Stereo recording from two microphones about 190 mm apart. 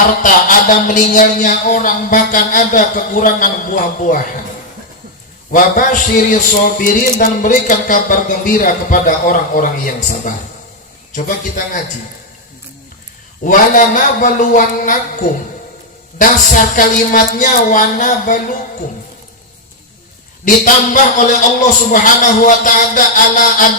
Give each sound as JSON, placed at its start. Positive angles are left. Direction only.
{"t": 0.2, "sound": "a man's voice", "side_deg": 45}
{"t": 5.5, "sound": "a man's voice", "side_deg": 45}
{"t": 13.4, "sound": "a man's voice", "side_deg": 45}
{"t": 20.4, "sound": "a man's voice", "side_deg": 45}